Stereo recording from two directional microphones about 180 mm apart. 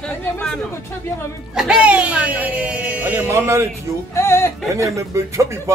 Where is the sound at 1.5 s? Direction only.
5° right (ahead or behind).